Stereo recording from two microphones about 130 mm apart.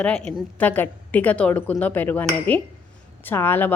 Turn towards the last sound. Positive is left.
turn(degrees=15)  # may be behind; listen again after turning